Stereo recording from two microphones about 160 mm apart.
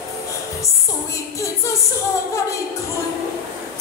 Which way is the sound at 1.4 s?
20° left (ahead or behind).